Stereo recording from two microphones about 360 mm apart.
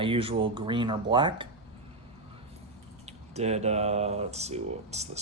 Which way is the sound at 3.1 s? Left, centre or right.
Centre.